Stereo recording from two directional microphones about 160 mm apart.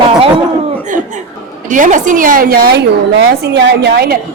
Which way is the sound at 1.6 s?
55° right (ahead or behind).